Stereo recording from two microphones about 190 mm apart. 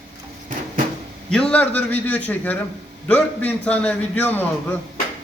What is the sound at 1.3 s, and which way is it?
A man's voice, 5° left (ahead or behind).